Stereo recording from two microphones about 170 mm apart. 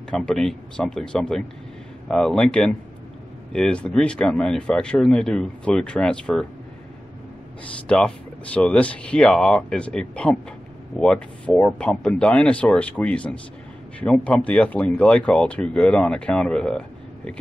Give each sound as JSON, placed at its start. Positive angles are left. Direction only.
{"t": 0.1, "sound": "speech", "side_deg": 5}
{"t": 7.9, "sound": "speech", "side_deg": 5}